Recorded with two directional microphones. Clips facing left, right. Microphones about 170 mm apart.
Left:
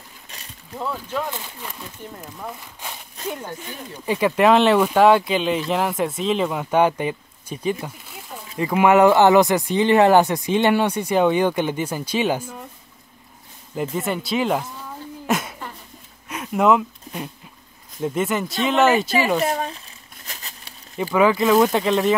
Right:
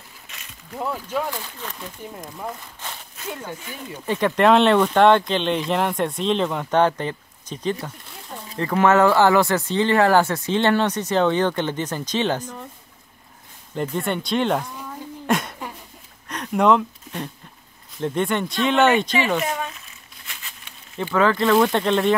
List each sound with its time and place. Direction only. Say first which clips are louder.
0.3 s a sound: left 2 dB; 35° left (ahead or behind)
0.7 s speech: right 1 dB; 10° right (ahead or behind)
1.3 s speech: right 1 dB; 10° left (ahead or behind)
3.3 s speech: left 2 dB; 15° left (ahead or behind)
7.8 s a sound: left 1 dB; 5° left (ahead or behind)
8.5 s speech: left 2 dB; 10° left (ahead or behind)
13.7 s speech: even; 5° left (ahead or behind)
15.2 s a sound: right 1 dB; centre (ahead or behind)
18.0 s speech: even; 5° left (ahead or behind)
19.3 s crumpling: left 3 dB; 35° left (ahead or behind)
21.0 s speech: left 2 dB; 10° left (ahead or behind)